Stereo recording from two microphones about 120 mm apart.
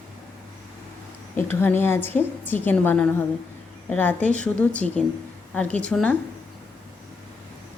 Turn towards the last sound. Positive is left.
turn(degrees=10)  # may be behind; listen again after turning